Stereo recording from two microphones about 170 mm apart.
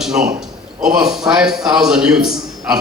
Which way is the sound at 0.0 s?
5° right (ahead or behind).